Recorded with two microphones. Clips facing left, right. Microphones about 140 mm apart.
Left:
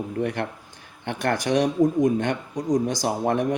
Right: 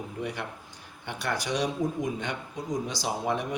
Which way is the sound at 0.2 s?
55° left (ahead or behind).